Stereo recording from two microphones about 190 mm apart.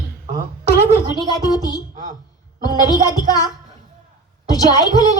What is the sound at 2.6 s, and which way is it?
Speech, 20° left (ahead or behind).